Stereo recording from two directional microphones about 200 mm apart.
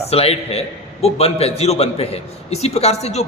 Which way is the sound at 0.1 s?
30° left (ahead or behind).